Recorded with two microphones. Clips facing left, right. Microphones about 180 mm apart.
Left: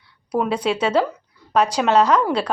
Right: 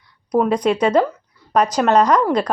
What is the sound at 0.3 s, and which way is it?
Speech, 5° left (ahead or behind).